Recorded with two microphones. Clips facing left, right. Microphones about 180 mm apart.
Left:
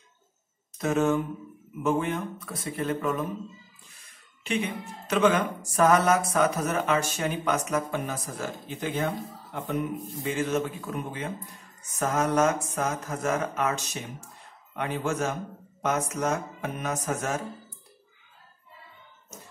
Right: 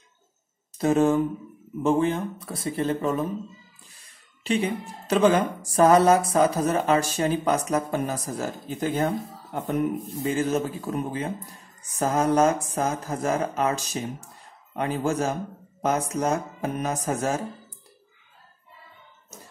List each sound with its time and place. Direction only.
0.7 s speech: 30° right (ahead or behind)